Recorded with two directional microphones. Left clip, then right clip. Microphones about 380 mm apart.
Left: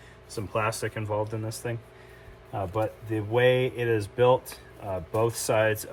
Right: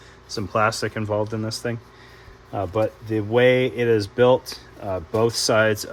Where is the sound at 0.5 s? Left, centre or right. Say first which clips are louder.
Right 7 dB; right.